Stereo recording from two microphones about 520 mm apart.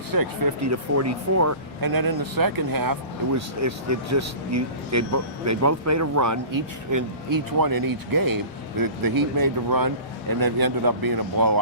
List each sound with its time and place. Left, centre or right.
0.1 s speech: right